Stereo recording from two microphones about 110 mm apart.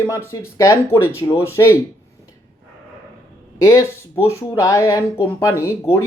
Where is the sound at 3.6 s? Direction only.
30° left (ahead or behind).